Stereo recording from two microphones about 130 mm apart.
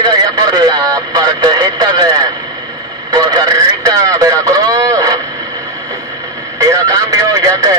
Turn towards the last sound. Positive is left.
turn(degrees=-30)  # may be behind; listen again after turning